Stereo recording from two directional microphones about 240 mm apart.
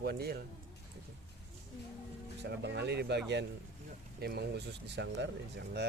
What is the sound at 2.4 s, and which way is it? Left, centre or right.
Speech, right.